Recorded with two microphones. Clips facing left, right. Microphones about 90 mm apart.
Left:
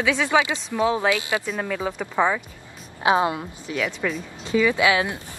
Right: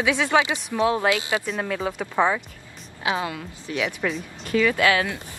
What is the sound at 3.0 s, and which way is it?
Speech, 25° left (ahead or behind).